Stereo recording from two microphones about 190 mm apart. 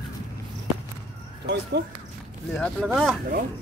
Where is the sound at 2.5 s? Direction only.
5° left (ahead or behind).